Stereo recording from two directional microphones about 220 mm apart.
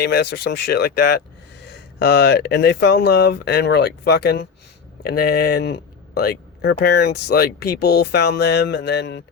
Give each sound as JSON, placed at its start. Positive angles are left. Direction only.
{"t": 0.0, "sound": "speech", "side_deg": 45}